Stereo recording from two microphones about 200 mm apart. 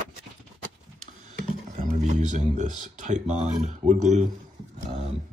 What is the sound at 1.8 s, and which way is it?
Speech, 40° right (ahead or behind).